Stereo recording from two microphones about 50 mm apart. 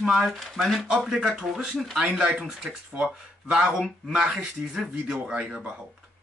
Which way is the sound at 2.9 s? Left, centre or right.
Right.